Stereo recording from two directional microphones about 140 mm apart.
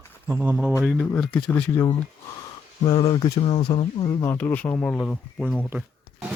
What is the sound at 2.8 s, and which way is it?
Speech, 30° left (ahead or behind).